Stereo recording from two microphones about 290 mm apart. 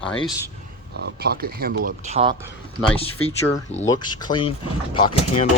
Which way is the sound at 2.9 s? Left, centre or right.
Centre.